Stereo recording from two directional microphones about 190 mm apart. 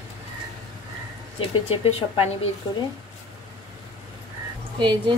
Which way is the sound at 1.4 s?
30° left (ahead or behind).